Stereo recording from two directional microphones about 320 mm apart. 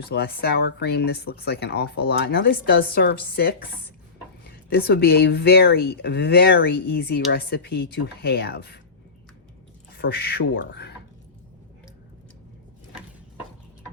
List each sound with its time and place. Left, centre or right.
0.0 s speech: left
10.0 s speech: left